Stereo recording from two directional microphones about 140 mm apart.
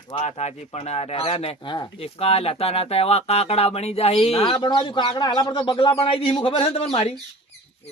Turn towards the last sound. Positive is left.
turn(degrees=45)  # may be behind; listen again after turning